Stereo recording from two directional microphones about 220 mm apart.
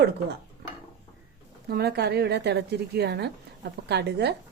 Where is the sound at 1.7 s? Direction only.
45° right (ahead or behind).